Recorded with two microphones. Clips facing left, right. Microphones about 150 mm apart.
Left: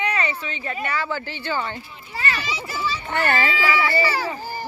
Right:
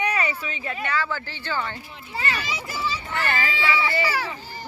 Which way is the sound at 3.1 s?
50° left (ahead or behind).